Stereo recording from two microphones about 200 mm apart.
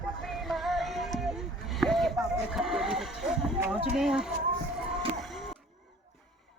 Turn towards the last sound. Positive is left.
turn(degrees=0)  # may be behind; listen again after turning